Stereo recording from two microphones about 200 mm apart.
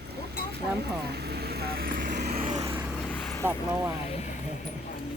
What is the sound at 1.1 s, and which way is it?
Vehicle, 55° right (ahead or behind).